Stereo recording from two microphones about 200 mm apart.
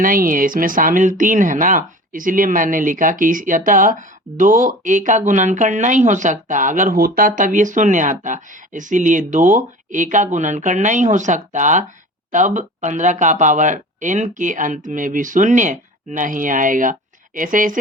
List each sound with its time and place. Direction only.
0.0 s speech: 45° right (ahead or behind)